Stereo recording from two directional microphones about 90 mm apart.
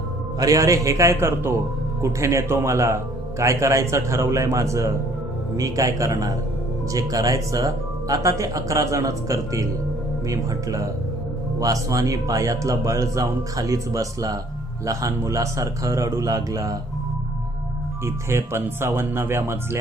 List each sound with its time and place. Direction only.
0.3 s speech: 40° right (ahead or behind)
18.0 s speech: 30° right (ahead or behind)